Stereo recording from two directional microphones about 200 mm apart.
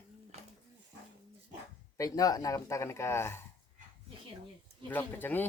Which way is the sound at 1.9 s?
15° left (ahead or behind).